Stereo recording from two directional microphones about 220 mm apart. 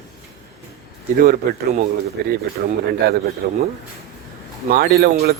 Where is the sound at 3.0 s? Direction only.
45° right (ahead or behind).